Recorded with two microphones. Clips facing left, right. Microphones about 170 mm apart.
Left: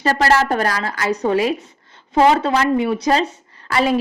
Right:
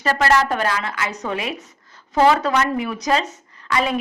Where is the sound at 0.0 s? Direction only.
35° left (ahead or behind).